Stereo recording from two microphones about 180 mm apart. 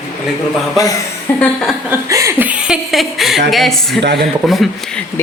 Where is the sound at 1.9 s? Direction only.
15° right (ahead or behind); by 4.0 s centre (ahead or behind).